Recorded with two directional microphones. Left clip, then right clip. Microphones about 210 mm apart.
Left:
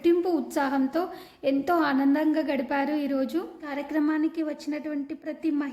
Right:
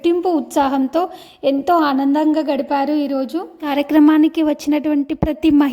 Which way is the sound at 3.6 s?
40° right (ahead or behind).